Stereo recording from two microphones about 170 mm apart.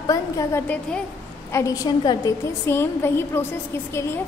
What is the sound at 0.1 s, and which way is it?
A woman's voice, 20° left (ahead or behind).